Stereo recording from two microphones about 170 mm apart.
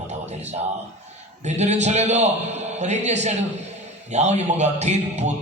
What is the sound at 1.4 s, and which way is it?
A man's voice, 40° right (ahead or behind).